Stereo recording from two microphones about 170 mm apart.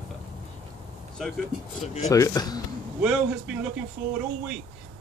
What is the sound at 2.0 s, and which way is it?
Speech, 20° left (ahead or behind).